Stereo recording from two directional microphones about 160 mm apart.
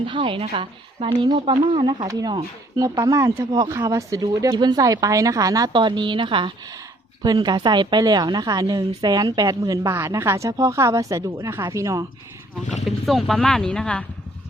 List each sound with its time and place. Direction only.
0.0 s a woman's voice: 30° right (ahead or behind)
12.8 s speech: centre (ahead or behind)